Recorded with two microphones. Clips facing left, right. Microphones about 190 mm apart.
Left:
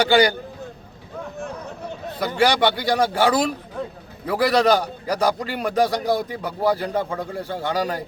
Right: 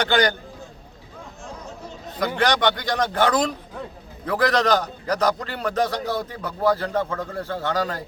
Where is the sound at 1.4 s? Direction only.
60° left (ahead or behind).